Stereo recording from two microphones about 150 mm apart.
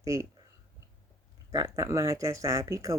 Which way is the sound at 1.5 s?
20° right (ahead or behind).